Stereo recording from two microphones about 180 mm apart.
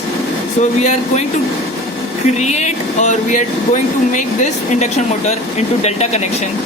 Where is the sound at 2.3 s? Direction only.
40° left (ahead or behind).